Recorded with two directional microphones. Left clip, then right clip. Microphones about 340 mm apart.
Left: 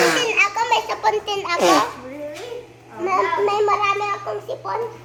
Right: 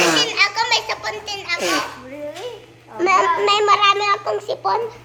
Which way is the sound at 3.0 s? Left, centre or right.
Right.